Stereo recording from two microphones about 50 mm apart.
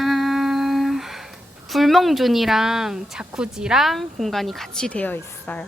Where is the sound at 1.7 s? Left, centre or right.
Centre.